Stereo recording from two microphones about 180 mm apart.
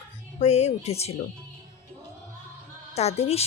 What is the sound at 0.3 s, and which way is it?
Speech, 35° left (ahead or behind).